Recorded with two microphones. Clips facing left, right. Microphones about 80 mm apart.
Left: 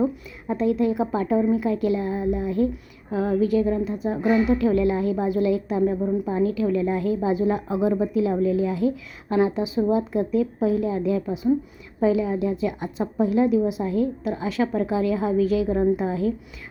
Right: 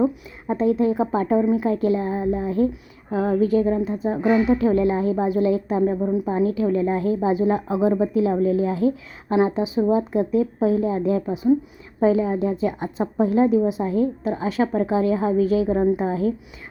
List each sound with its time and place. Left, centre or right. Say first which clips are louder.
0.4 s a woman's voice: right 2 dB; right
6.0 s a woman's voice: right 2 dB; centre
6.3 s a woman's voice: right 1 dB; right